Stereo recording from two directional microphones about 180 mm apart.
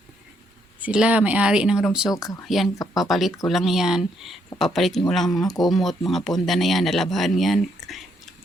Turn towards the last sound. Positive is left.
turn(degrees=0)  # may be behind; listen again after turning